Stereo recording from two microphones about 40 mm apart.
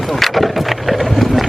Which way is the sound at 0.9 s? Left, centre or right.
Centre.